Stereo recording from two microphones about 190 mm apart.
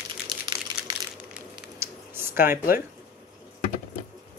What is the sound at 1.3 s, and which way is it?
Typing, 10° right (ahead or behind).